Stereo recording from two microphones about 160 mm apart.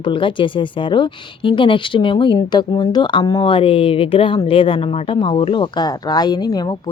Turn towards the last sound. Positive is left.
turn(degrees=25)  # may be behind; listen again after turning